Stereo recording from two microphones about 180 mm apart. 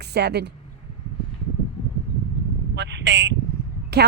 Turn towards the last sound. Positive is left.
turn(degrees=-65)  # may be behind; listen again after turning